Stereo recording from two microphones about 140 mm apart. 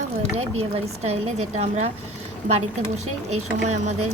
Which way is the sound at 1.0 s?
50° right (ahead or behind).